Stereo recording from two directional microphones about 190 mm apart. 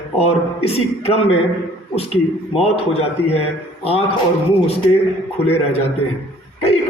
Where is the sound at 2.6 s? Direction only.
30° left (ahead or behind).